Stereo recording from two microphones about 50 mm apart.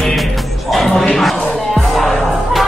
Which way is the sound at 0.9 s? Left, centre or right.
Centre.